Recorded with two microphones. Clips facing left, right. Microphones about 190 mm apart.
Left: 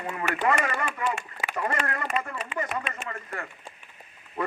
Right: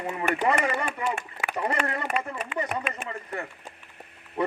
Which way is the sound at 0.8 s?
55° right (ahead or behind).